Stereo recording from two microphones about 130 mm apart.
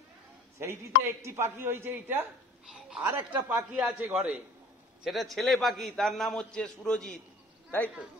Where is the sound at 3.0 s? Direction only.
15° right (ahead or behind); by 7.1 s 5° left (ahead or behind).